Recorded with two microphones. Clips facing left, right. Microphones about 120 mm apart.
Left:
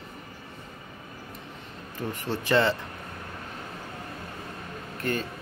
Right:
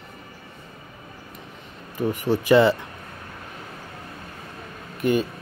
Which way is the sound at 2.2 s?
15° right (ahead or behind).